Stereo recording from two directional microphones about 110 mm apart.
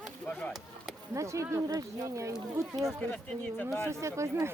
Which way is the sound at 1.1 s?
25° right (ahead or behind).